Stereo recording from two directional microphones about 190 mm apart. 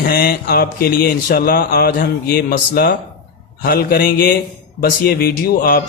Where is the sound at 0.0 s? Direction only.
50° left (ahead or behind).